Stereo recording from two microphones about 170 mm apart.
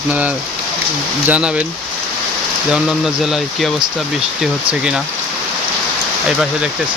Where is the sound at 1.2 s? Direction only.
10° right (ahead or behind).